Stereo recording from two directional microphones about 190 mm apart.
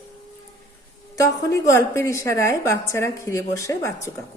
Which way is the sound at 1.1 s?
15° left (ahead or behind).